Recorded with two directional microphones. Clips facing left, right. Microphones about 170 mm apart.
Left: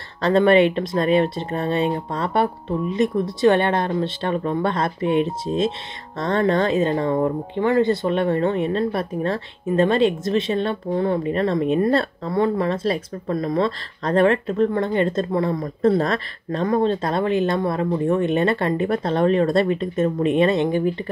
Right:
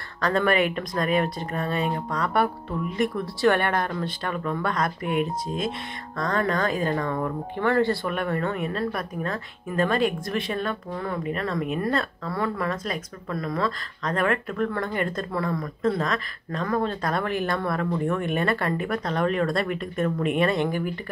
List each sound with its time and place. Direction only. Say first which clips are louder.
0.2 s speech: left 7 dB; 25° left (ahead or behind)
16.6 s speech: left 6 dB; 25° left (ahead or behind)